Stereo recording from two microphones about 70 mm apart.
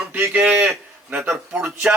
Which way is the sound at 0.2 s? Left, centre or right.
Right.